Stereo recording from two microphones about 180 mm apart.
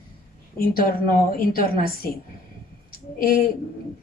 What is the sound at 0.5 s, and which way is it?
Speech, 55° left (ahead or behind).